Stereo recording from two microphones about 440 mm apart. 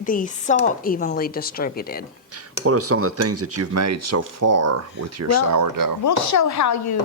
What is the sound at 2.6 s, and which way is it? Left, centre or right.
Speech, right.